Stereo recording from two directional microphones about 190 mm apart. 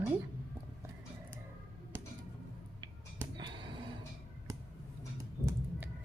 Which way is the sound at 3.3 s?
25° right (ahead or behind).